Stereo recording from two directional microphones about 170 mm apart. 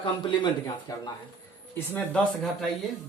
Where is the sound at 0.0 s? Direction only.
30° left (ahead or behind).